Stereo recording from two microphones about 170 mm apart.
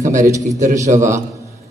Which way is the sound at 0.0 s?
45° right (ahead or behind).